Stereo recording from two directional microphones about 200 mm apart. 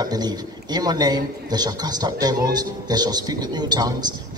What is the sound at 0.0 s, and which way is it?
A man's voice, 20° right (ahead or behind).